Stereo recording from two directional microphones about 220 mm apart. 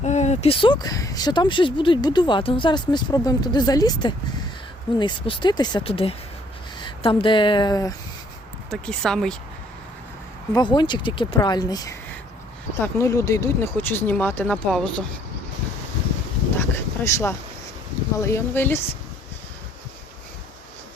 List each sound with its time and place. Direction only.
0.0 s speech: 30° left (ahead or behind)
8.7 s speech: centre (ahead or behind)
10.5 s speech: 20° left (ahead or behind); by 15.0 s 5° left (ahead or behind)
16.6 s a sound: 10° left (ahead or behind)
18.2 s speech: 10° left (ahead or behind)